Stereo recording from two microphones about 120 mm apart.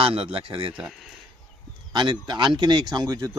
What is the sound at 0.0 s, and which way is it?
Speech, 50° right (ahead or behind).